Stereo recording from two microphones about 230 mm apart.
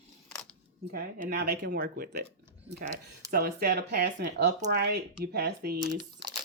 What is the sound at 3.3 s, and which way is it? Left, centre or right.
Speech, right.